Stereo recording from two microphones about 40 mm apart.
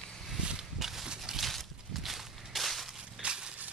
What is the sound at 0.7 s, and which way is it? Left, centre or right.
Horse, centre.